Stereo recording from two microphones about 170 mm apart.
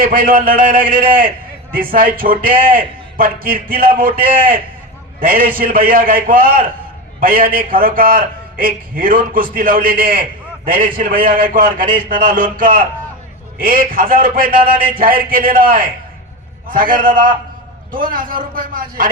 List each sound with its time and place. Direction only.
0.0 s a man's voice: 55° right (ahead or behind)